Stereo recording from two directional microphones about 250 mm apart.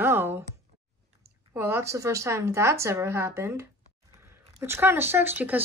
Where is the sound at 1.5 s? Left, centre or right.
Centre.